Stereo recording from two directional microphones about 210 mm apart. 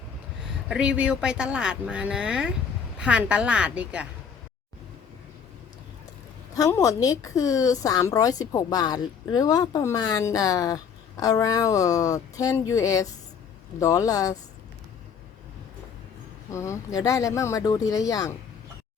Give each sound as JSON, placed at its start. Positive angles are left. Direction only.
{"t": 0.7, "sound": "speech", "side_deg": -5}
{"t": 6.5, "sound": "a woman's voice", "side_deg": 15}
{"t": 16.5, "sound": "a woman's voice", "side_deg": 15}